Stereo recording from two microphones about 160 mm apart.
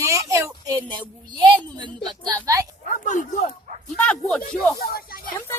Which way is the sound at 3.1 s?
55° left (ahead or behind).